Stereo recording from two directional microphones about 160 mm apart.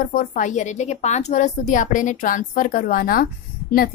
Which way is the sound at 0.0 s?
60° left (ahead or behind).